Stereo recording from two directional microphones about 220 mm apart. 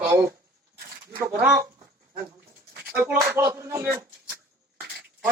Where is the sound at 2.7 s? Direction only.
45° right (ahead or behind).